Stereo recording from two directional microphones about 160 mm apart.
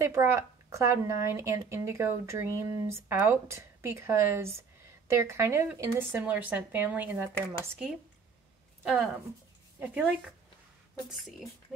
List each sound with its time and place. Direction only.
0.0 s a woman's voice: 20° right (ahead or behind)
8.8 s speech: 5° right (ahead or behind)